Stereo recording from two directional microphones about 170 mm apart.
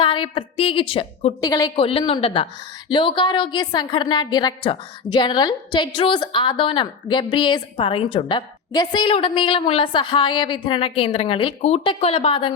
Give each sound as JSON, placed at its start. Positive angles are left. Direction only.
{"t": 0.0, "sound": "a woman's voice", "side_deg": 30}
{"t": 1.7, "sound": "a woman's voice", "side_deg": 30}